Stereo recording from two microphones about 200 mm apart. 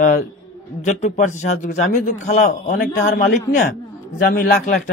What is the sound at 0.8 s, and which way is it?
A man's voice, 35° left (ahead or behind).